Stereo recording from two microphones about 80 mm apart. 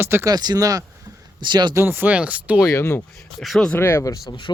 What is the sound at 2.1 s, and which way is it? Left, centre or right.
Speech, centre.